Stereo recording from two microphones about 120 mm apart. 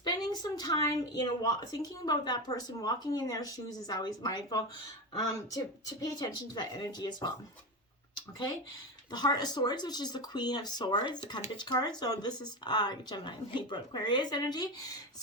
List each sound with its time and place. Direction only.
0.0 s a sound: 35° left (ahead or behind)
1.4 s speech: 30° left (ahead or behind)
9.1 s speech: 35° left (ahead or behind)